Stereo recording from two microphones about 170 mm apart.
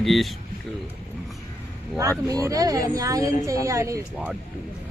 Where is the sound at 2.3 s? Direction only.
20° right (ahead or behind).